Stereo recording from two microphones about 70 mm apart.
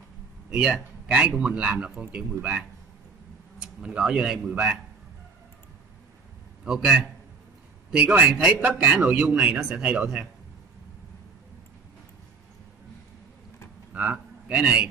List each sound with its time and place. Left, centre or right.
0.5 s a man's voice: centre
6.6 s a man's voice: centre
7.9 s a man's voice: right
13.9 s a man's voice: centre